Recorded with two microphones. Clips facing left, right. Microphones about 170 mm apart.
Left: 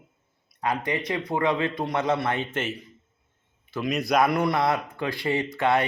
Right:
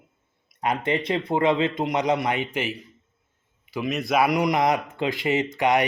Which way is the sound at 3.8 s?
Centre (ahead or behind).